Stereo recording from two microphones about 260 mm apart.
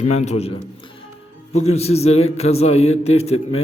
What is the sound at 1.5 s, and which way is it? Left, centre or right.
A man's voice, left.